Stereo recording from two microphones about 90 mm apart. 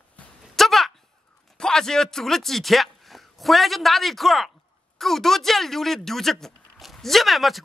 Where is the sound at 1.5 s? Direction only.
5° left (ahead or behind).